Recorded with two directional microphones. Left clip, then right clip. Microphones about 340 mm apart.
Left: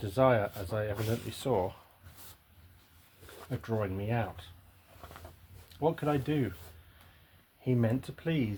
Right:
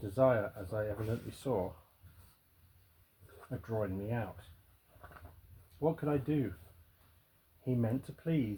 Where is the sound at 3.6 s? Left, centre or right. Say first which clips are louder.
Left 3 dB; left.